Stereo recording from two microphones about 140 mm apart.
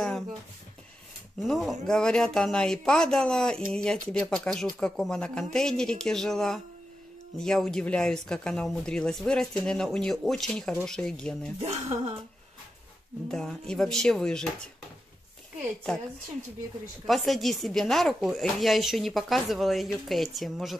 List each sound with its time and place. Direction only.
1.4 s speech: centre (ahead or behind)
11.6 s speech: 50° right (ahead or behind)
13.3 s speech: 5° left (ahead or behind)
17.0 s speech: centre (ahead or behind)